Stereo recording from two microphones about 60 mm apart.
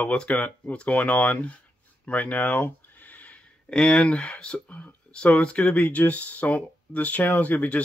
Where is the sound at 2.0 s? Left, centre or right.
Left.